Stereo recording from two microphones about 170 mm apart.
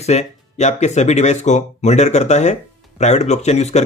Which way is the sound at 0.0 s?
40° left (ahead or behind).